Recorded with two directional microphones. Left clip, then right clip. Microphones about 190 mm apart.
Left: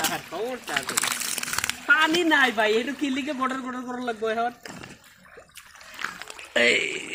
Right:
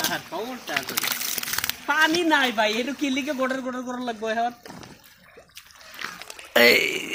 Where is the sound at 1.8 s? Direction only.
55° right (ahead or behind).